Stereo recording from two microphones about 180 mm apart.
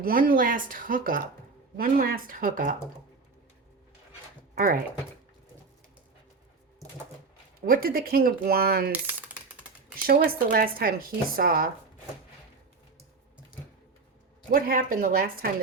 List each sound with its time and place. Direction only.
0.0 s speech: 50° right (ahead or behind)
4.5 s speech: 55° right (ahead or behind)
7.6 s speech: 55° right (ahead or behind)
10.1 s speech: 55° right (ahead or behind)
14.5 s speech: 50° right (ahead or behind)